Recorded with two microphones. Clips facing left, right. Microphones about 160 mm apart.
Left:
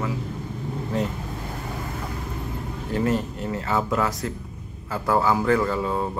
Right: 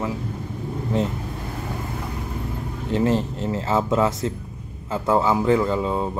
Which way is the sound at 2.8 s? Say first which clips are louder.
Right 3 dB; 25° right (ahead or behind).